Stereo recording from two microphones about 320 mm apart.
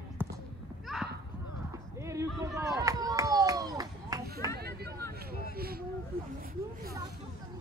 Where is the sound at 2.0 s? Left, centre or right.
Centre.